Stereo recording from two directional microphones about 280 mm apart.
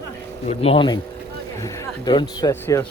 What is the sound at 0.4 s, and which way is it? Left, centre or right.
A man's voice, left.